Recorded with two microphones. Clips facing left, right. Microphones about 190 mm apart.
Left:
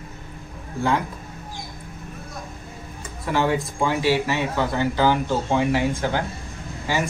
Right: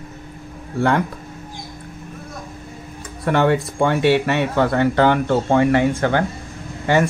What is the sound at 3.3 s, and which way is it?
Speech, 65° right (ahead or behind).